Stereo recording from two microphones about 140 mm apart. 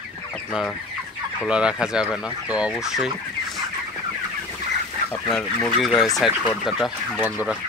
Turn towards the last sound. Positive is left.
turn(degrees=0)  # may be behind; listen again after turning